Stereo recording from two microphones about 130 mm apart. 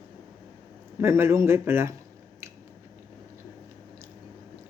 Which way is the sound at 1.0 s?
20° right (ahead or behind).